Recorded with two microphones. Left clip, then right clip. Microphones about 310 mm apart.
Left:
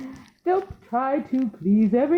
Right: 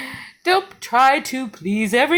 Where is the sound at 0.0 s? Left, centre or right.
Right.